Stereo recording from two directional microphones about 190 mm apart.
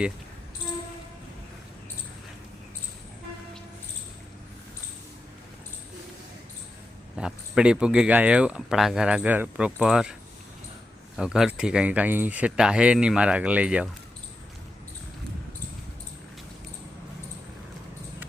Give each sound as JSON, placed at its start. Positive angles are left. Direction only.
{"t": 7.2, "sound": "speech", "side_deg": -5}
{"t": 11.2, "sound": "speech", "side_deg": -5}